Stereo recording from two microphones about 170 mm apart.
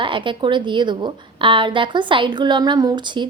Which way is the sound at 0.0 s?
30° right (ahead or behind).